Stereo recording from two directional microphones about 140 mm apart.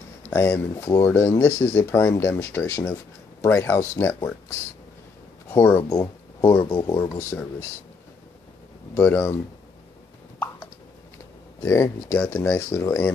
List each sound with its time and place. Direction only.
0.3 s speech: 20° left (ahead or behind)
5.5 s speech: 15° left (ahead or behind)
6.7 s speech: 30° left (ahead or behind)
7.0 s speech: 20° left (ahead or behind)
8.9 s speech: 15° left (ahead or behind)
11.6 s speech: 15° left (ahead or behind)